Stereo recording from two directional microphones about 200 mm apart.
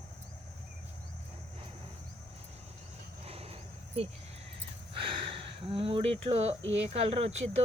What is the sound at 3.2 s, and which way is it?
Cricket, 30° right (ahead or behind).